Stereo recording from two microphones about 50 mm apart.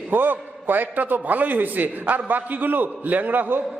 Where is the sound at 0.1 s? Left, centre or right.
Right.